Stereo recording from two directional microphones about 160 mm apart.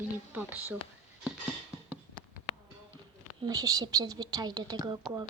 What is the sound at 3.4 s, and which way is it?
Speech, 25° right (ahead or behind).